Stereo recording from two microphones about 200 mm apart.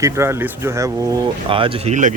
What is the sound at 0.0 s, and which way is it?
Speech, 10° right (ahead or behind).